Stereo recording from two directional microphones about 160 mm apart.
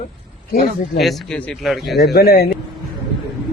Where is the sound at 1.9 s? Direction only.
80° left.